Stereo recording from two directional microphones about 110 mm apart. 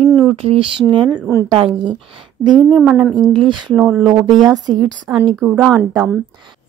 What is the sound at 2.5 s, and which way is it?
Speech, 5° right (ahead or behind).